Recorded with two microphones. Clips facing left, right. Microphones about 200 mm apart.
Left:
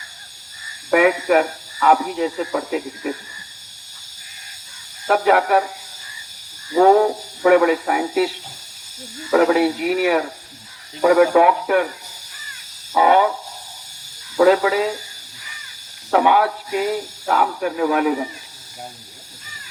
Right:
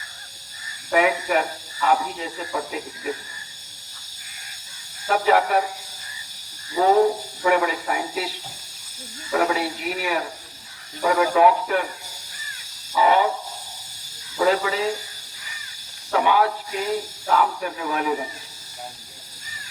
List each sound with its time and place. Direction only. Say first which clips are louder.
0.9 s speech: left 5 dB; 60° left (ahead or behind)
5.0 s speech: left 3 dB; 60° left (ahead or behind)
6.7 s speech: left 4 dB; 55° left (ahead or behind)
9.3 s speech: left 8 dB; 60° left (ahead or behind)
12.9 s a sound: left 3 dB; 55° left (ahead or behind)
14.3 s speech: left 6 dB; 60° left (ahead or behind)
16.1 s speech: left 4 dB; 60° left (ahead or behind)